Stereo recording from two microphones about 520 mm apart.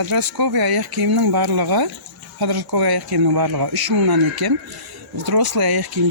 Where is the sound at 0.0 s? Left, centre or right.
Right.